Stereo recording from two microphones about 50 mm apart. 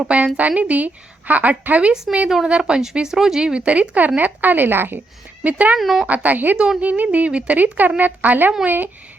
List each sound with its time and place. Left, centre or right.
0.0 s a woman's voice: right
3.7 s a woman's voice: right
5.4 s speech: right
5.7 s speech: centre
6.1 s a woman's voice: right